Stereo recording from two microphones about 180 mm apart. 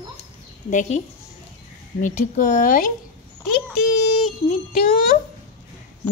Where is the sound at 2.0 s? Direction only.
45° left (ahead or behind).